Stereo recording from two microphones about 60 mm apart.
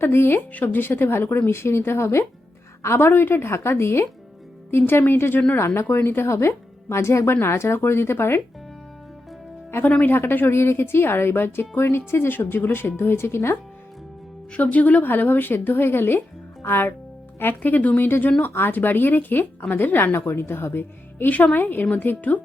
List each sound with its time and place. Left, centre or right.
0.0 s speech: left
9.8 s speech: left
14.5 s speech: left